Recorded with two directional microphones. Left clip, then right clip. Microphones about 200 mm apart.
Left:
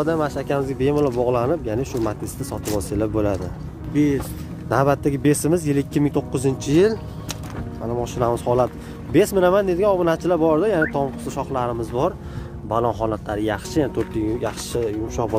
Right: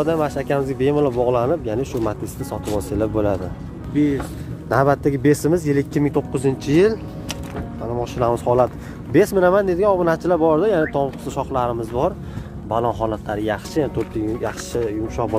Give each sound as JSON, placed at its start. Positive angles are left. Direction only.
{"t": 0.0, "sound": "speech", "side_deg": 0}
{"t": 3.9, "sound": "speech", "side_deg": 60}
{"t": 4.6, "sound": "speech", "side_deg": 5}